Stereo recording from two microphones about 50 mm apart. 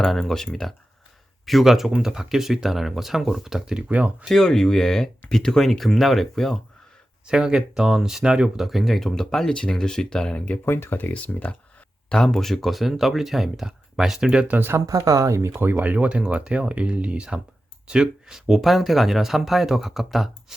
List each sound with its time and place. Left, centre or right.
0.0 s speech: centre
1.5 s speech: centre
3.8 s speech: right
4.3 s speech: centre
7.3 s speech: centre
9.5 s speech: centre
10.7 s speech: left
11.1 s speech: left
12.0 s speech: centre
15.2 s speech: right
15.5 s speech: right
16.0 s speech: right; by 20.6 s centre